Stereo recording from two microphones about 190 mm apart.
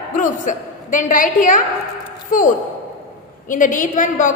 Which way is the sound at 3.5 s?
45° left (ahead or behind).